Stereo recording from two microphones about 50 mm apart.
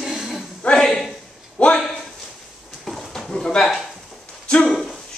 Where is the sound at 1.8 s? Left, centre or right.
Centre.